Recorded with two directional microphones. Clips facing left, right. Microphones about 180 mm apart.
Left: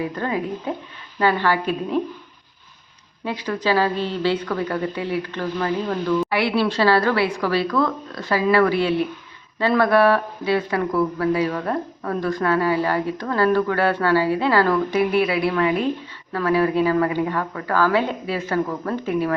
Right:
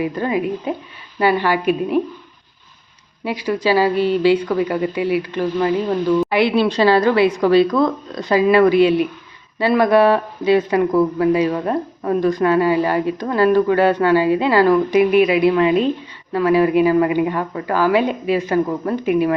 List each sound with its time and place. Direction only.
0.0 s speech: 10° right (ahead or behind)
3.2 s speech: 10° right (ahead or behind)